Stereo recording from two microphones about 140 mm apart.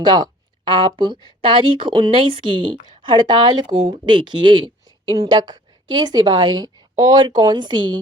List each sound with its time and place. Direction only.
0.0 s speech: 30° right (ahead or behind)